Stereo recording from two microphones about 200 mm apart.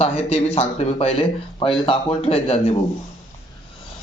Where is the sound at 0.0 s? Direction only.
30° left (ahead or behind).